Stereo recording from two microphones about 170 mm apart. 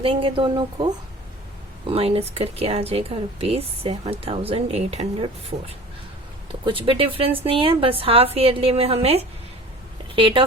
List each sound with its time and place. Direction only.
0.0 s speech: 30° right (ahead or behind)